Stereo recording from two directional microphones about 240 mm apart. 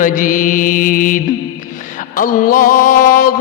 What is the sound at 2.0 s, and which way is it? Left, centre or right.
Music, left.